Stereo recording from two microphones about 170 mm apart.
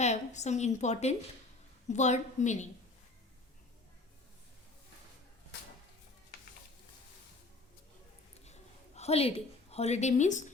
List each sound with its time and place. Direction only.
0.0 s a woman's voice: 40° left (ahead or behind)
9.0 s a woman's voice: 35° left (ahead or behind)